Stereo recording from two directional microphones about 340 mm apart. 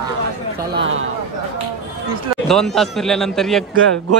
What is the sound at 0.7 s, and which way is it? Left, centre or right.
Speech, right.